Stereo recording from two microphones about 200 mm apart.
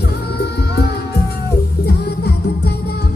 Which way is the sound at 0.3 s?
55° left (ahead or behind).